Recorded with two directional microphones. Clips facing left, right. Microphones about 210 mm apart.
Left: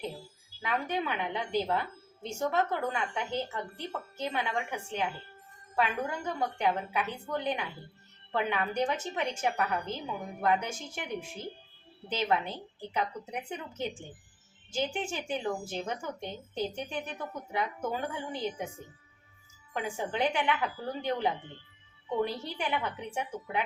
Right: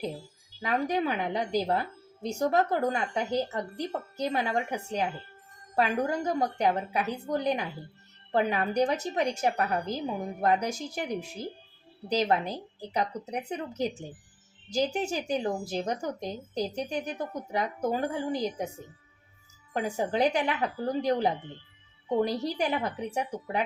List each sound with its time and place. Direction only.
0.6 s a woman's voice: 35° right (ahead or behind)
19.7 s a woman's voice: 40° right (ahead or behind)